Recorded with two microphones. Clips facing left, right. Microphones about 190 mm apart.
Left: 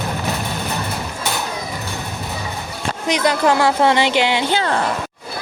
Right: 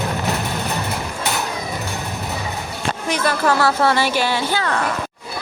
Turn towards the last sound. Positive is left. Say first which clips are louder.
# left 2 dB
turn(degrees=30)  # may be behind; listen again after turning